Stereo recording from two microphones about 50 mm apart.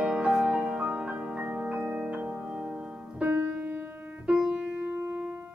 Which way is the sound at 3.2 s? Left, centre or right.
Right.